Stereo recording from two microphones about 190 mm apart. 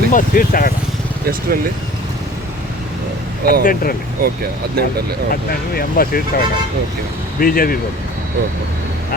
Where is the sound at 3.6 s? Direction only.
45° left (ahead or behind).